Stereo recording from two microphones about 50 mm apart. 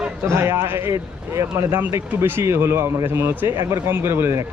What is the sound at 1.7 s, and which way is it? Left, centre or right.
Speech, right.